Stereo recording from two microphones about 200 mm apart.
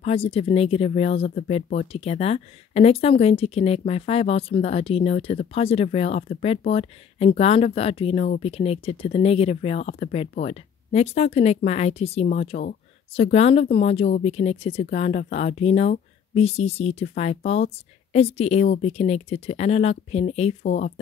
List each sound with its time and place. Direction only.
0.0 s speech: 30° left (ahead or behind)